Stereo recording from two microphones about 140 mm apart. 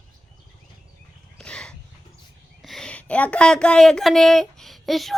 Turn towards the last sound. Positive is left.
turn(degrees=0)  # may be behind; listen again after turning